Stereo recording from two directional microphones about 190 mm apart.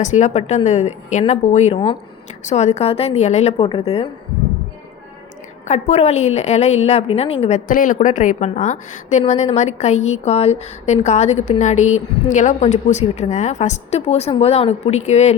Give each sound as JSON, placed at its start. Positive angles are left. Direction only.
{"t": 0.0, "sound": "a woman's voice", "side_deg": 40}
{"t": 5.6, "sound": "a woman's voice", "side_deg": 40}